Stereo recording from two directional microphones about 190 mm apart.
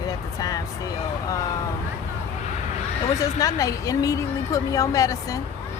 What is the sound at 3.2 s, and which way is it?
A woman's voice, 15° left (ahead or behind).